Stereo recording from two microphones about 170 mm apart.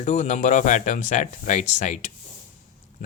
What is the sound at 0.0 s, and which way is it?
Speech, 45° left (ahead or behind).